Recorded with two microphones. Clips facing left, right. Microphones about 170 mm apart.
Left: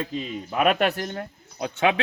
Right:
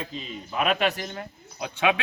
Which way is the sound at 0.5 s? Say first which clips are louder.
Left 3 dB; 50° left (ahead or behind).